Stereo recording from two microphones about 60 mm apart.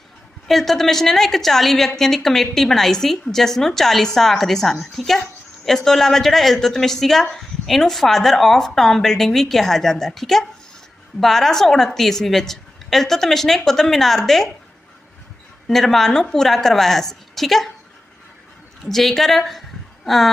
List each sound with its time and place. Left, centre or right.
0.4 s a woman's voice: centre
15.6 s a woman's voice: centre
18.9 s a woman's voice: centre